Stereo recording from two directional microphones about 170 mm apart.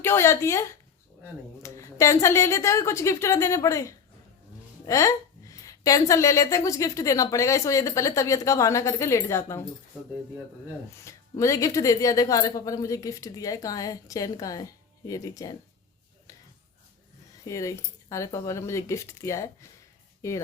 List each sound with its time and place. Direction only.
0.0 s a woman's voice: 15° left (ahead or behind)
11.0 s a woman's voice: 20° left (ahead or behind)
17.4 s a woman's voice: 20° left (ahead or behind)